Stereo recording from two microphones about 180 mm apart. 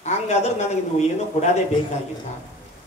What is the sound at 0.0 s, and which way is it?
A man's voice, 40° left (ahead or behind).